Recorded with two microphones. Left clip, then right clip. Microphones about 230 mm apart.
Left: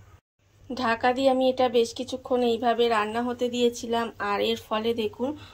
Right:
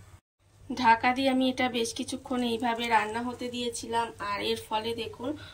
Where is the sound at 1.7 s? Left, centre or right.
Left.